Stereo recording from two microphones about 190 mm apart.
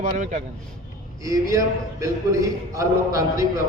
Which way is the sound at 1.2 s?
15° right (ahead or behind).